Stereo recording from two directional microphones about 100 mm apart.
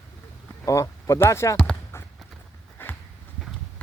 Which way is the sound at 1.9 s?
25° left (ahead or behind).